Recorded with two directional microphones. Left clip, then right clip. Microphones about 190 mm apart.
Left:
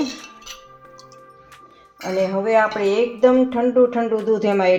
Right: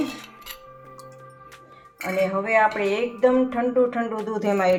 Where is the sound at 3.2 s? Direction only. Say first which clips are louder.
Left 3 dB; 45° left (ahead or behind).